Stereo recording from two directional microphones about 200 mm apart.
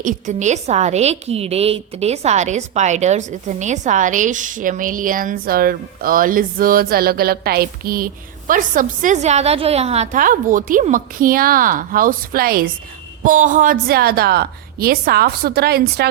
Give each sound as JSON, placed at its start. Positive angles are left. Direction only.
{"t": 0.0, "sound": "a woman's voice", "side_deg": -40}